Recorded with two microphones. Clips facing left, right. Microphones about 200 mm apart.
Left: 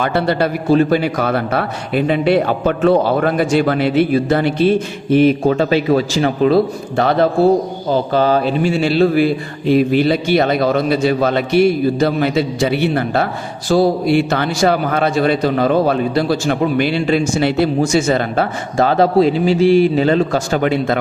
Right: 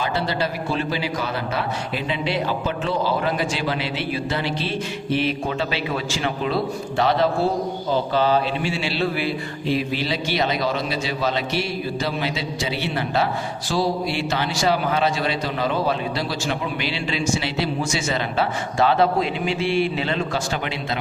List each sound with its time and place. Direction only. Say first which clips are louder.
0.0 s a man's voice: left 8 dB; 60° left (ahead or behind)